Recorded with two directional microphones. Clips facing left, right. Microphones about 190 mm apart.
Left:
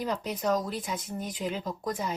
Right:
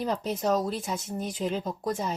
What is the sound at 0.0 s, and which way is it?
Speech, 30° right (ahead or behind).